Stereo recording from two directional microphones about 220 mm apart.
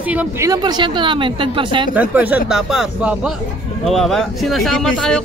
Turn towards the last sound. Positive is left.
turn(degrees=5)  # may be behind; listen again after turning